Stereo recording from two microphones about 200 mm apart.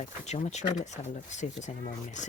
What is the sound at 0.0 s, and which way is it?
Speech, 35° left (ahead or behind).